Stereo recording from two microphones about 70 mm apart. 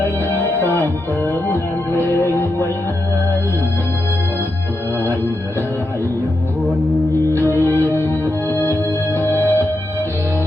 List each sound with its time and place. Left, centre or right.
0.0 s music: left
7.5 s music: left